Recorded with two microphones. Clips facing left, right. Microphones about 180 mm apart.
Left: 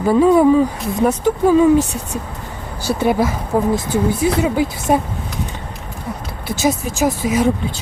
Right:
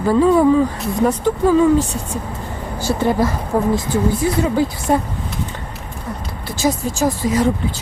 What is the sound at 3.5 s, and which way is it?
Speech, 15° left (ahead or behind).